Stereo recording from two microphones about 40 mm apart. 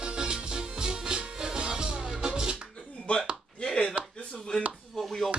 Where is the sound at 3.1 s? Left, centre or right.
Left.